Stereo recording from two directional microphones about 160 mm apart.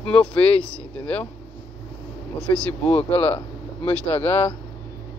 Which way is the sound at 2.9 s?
40° left (ahead or behind).